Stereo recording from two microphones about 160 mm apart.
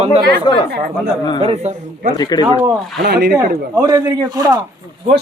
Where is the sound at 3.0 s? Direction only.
90° right.